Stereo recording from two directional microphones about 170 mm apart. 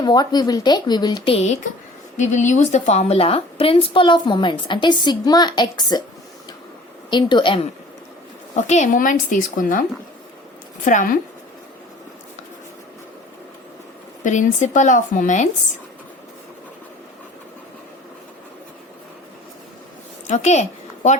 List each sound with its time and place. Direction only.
0.0 s a woman's voice: 25° left (ahead or behind)
7.1 s speech: 25° left (ahead or behind)
8.5 s speech: 45° left (ahead or behind)
10.8 s speech: 55° left (ahead or behind)
14.3 s speech: 45° left (ahead or behind)
20.2 s a sound: 45° left (ahead or behind)